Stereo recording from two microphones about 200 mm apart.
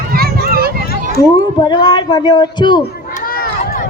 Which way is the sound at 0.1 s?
50° right (ahead or behind).